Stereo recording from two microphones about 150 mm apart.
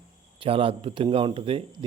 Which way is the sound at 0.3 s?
40° right (ahead or behind).